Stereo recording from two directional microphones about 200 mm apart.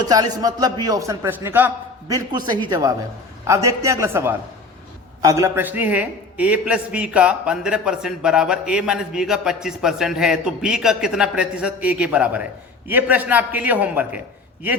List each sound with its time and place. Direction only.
0.0 s a man's voice: 20° right (ahead or behind)